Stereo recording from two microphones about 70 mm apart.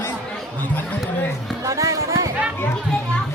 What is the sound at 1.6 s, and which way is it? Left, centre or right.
Music, right.